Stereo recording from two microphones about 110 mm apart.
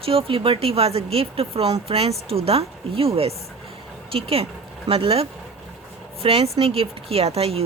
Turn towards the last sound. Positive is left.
turn(degrees=-70)  # may be behind; listen again after turning